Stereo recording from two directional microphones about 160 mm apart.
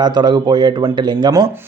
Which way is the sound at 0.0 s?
25° right (ahead or behind).